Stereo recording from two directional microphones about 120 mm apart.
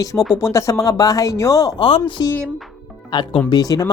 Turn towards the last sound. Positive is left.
turn(degrees=30)  # may be behind; listen again after turning